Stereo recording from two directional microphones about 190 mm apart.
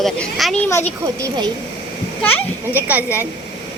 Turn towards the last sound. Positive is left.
turn(degrees=-10)  # may be behind; listen again after turning